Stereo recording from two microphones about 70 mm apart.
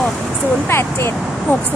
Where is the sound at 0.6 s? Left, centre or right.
Left.